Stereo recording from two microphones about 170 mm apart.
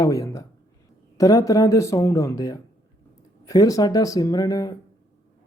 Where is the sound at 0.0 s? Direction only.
20° left (ahead or behind).